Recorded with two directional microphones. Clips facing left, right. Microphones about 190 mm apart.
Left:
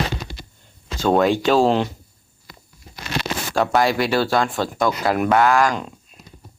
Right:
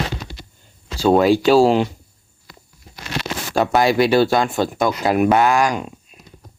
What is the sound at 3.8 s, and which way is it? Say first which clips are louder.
Speech: right 7 dB; 20° right (ahead or behind).